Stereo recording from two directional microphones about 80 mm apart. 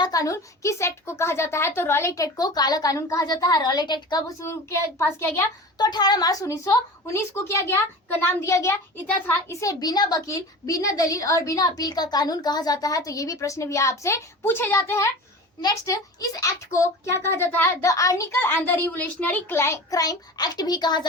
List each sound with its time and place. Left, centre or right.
0.0 s a sound: left
0.3 s a woman's voice: left
4.4 s a woman's voice: left
5.7 s a woman's voice: left
9.8 s a child's voice: left
10.2 s a woman's voice: left
14.4 s a woman's voice: left
15.7 s a woman's voice: left
17.8 s a woman's voice: left
18.3 s a child's voice: left
19.5 s a woman's voice: left
19.9 s a child's voice: left